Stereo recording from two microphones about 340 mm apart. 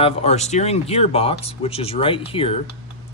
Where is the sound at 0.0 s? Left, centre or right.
Centre.